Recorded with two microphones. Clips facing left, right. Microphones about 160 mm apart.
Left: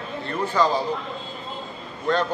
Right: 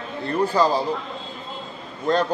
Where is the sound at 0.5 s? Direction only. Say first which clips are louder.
Even; 35° right (ahead or behind).